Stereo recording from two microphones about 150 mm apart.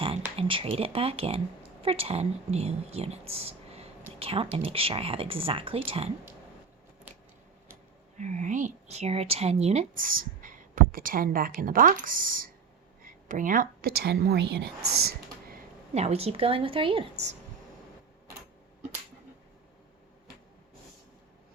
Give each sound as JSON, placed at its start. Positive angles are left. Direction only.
{"t": 0.0, "sound": "a woman's voice", "side_deg": -40}
{"t": 4.2, "sound": "a sound", "side_deg": -40}
{"t": 4.5, "sound": "speech", "side_deg": -40}
{"t": 8.2, "sound": "a woman's voice", "side_deg": -50}
{"t": 9.9, "sound": "a woman's voice", "side_deg": -70}
{"t": 16.0, "sound": "speech", "side_deg": -45}